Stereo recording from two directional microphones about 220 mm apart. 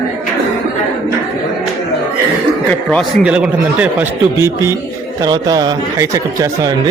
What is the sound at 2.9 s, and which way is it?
A man's voice, 5° right (ahead or behind).